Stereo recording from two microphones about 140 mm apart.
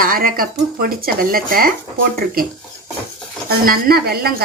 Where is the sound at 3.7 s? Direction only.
90° right.